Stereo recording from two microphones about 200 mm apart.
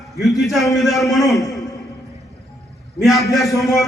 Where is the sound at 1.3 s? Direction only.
15° left (ahead or behind).